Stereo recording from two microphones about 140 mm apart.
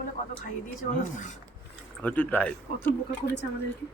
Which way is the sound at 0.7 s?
60° left (ahead or behind).